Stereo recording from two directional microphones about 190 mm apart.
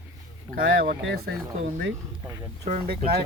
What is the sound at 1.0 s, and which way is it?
Speech, 55° right (ahead or behind).